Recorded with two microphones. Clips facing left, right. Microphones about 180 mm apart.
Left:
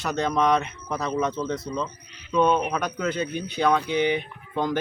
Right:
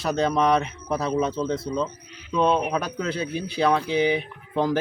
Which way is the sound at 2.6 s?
5° right (ahead or behind).